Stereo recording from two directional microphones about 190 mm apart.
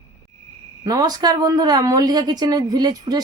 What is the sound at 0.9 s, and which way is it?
A woman's voice, 20° right (ahead or behind).